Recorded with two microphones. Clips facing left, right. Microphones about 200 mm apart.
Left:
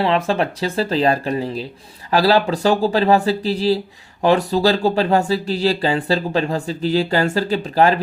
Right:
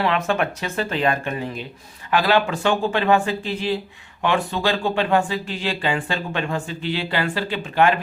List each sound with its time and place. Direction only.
0.0 s speech: 30° left (ahead or behind)